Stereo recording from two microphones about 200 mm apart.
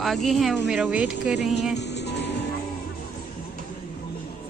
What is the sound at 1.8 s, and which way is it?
Music, 60° left (ahead or behind).